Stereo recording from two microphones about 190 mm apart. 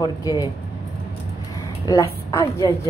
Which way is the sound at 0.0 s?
20° left (ahead or behind).